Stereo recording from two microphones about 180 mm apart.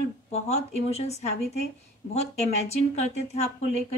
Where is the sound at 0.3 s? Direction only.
35° left (ahead or behind).